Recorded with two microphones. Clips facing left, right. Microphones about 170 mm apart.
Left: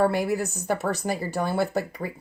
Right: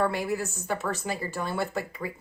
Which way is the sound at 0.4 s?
35° left (ahead or behind).